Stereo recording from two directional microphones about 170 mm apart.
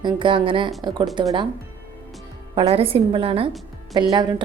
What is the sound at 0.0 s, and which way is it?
A woman's voice, 30° right (ahead or behind).